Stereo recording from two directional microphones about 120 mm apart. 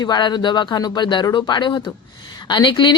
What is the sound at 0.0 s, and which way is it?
A woman's voice, 35° left (ahead or behind).